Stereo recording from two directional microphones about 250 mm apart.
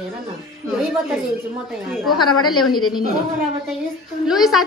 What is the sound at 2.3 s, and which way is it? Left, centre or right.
Speech, left.